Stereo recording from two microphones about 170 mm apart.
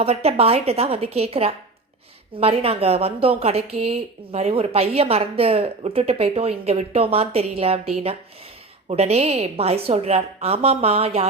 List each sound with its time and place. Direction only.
0.0 s a woman's voice: 35° right (ahead or behind)